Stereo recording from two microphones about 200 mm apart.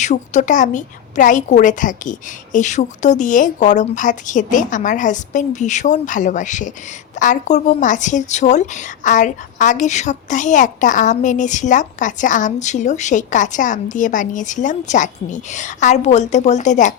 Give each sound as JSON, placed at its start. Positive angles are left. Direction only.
{"t": 0.0, "sound": "a woman's voice", "side_deg": 35}